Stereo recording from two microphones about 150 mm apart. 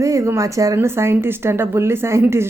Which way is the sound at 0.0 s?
20° right (ahead or behind).